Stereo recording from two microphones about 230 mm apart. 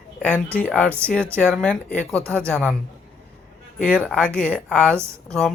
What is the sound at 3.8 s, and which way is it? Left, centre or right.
Speech, centre.